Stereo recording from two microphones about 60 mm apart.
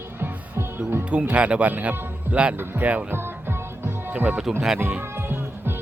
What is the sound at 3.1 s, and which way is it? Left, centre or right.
Music, right.